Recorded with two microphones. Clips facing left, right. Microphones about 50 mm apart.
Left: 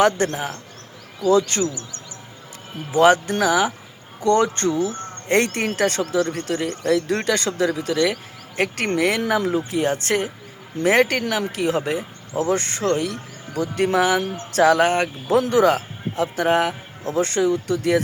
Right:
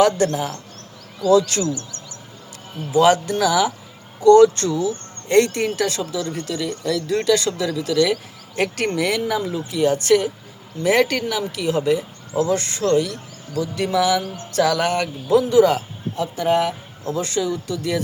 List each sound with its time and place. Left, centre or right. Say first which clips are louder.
0.0 s speech: right 2 dB; left
1.6 s speech: right 1 dB; left
2.9 s speech: even; left
4.9 s speech: even; left
8.1 s speech: right 4 dB; left
9.0 s speech: left 2 dB; left
9.2 s speech: left 2 dB; left
9.6 s speech: right 4 dB; left
14.0 s speech: right 2 dB; left
14.5 s speech: left 3 dB; left
15.4 s a man's voice: right 2 dB; left